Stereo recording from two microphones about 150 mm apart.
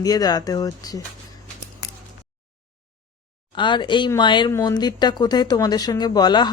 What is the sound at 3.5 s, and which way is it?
Speech, 30° left (ahead or behind).